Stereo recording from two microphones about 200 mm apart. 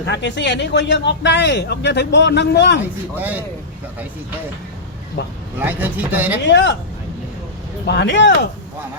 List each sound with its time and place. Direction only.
0.0 s speech: 60° left (ahead or behind)
2.8 s speech: 10° right (ahead or behind)
5.2 s speech: 55° left (ahead or behind)
5.5 s speech: 10° right (ahead or behind)
6.4 s speech: 60° left (ahead or behind)
7.9 s speech: 60° left (ahead or behind)